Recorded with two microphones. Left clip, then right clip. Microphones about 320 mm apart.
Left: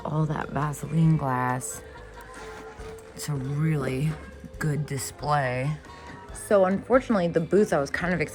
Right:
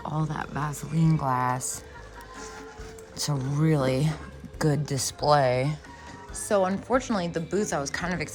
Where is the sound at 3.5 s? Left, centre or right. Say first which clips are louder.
Right 5 dB; centre.